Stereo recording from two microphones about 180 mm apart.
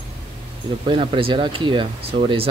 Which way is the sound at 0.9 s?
30° right (ahead or behind).